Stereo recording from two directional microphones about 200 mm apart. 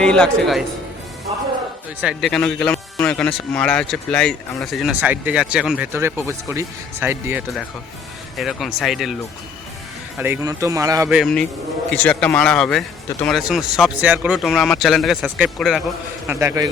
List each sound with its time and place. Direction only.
0.0 s speech: 5° left (ahead or behind)
2.0 s speech: centre (ahead or behind)
10.2 s speech: 10° right (ahead or behind)
11.1 s speech: centre (ahead or behind)
16.2 s a man's voice: 10° right (ahead or behind)